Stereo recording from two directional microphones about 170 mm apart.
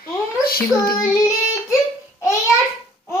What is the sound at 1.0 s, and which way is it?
Child singing, 15° left (ahead or behind).